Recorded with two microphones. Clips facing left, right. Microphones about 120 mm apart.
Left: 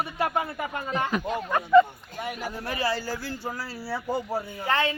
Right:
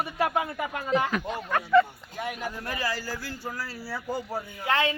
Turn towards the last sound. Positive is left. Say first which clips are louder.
# even
turn(degrees=0)  # may be behind; listen again after turning